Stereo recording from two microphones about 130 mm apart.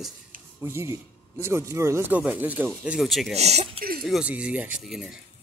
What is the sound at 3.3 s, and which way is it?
Speech, 55° right (ahead or behind).